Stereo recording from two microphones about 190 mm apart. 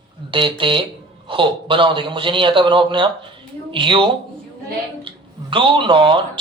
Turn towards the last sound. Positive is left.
turn(degrees=-25)  # may be behind; listen again after turning